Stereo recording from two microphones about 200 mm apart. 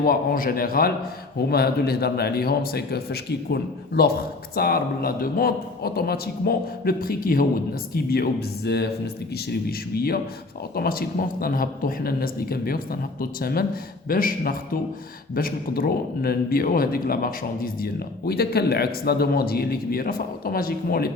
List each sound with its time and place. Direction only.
0.0 s a man's voice: 45° left (ahead or behind)